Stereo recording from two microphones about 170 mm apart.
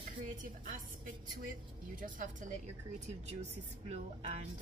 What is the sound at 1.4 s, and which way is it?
A woman's voice, 55° right (ahead or behind).